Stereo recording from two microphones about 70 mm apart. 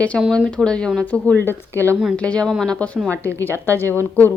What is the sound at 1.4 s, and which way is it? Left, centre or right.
Speech, left.